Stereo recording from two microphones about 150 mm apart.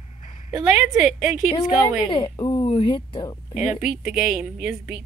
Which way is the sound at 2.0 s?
30° left (ahead or behind).